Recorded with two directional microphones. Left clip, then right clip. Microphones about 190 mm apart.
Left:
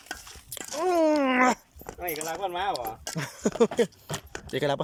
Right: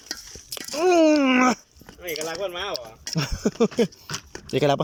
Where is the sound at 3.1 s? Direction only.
Centre (ahead or behind).